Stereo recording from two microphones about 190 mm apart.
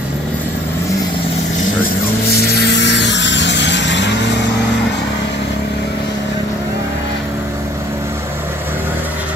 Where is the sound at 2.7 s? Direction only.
65° left (ahead or behind).